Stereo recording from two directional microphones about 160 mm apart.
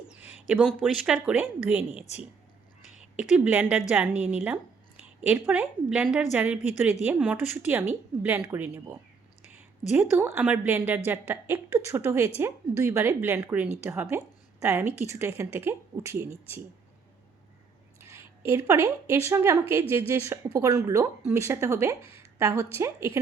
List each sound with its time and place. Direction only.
0.1 s a sound: 10° right (ahead or behind)
0.4 s a woman's voice: 5° right (ahead or behind)
2.8 s a sound: 45° left (ahead or behind)
3.2 s a woman's voice: 10° right (ahead or behind)
14.9 s a woman's voice: 45° left (ahead or behind)
15.2 s a woman's voice: 15° right (ahead or behind)
18.0 s a woman's voice: 15° right (ahead or behind)
22.0 s a sound: 35° left (ahead or behind)
22.8 s a woman's voice: 15° right (ahead or behind)